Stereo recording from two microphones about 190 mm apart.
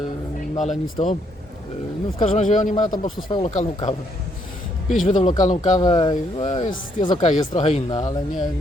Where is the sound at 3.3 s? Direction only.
25° left (ahead or behind).